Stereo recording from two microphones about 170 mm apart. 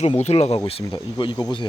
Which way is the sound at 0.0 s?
40° left (ahead or behind).